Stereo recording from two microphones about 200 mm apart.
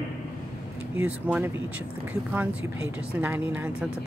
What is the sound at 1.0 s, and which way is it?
Speech, 5° right (ahead or behind).